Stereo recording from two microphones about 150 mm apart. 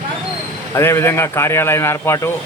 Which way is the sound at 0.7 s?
15° left (ahead or behind).